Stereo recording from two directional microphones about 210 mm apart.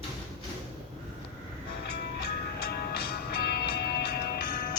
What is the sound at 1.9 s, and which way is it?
Music, 50° left (ahead or behind).